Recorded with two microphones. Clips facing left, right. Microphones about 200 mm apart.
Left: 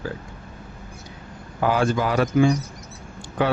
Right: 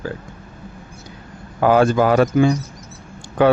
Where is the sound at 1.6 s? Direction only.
50° right (ahead or behind).